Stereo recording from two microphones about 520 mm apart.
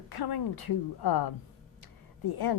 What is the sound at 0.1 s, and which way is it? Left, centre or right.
A woman's voice, left.